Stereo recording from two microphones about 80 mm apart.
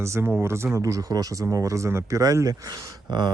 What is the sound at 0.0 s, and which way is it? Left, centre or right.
Speech, right.